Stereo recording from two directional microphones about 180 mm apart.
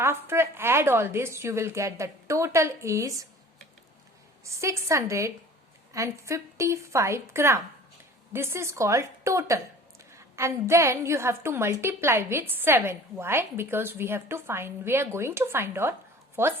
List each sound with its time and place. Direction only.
0.0 s a woman's voice: 15° right (ahead or behind)
4.4 s a woman's voice: 15° right (ahead or behind)